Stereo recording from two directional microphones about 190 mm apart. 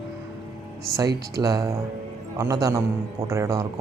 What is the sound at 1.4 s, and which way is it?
Speech, 15° right (ahead or behind).